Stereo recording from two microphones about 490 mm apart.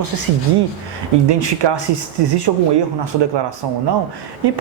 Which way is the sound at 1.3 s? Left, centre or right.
Right.